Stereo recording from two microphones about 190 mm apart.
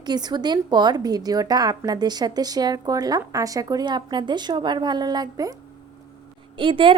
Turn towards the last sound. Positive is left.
turn(degrees=-25)  # may be behind; listen again after turning